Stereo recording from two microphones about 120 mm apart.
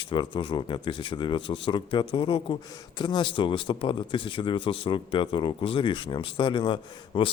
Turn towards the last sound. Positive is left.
turn(degrees=40)  # may be behind; listen again after turning